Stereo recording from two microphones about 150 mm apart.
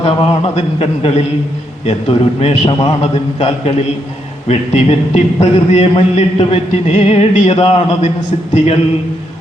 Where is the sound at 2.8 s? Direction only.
40° left (ahead or behind).